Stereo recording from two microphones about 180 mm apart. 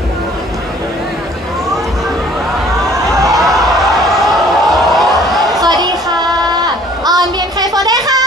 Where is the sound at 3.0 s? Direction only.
20° right (ahead or behind).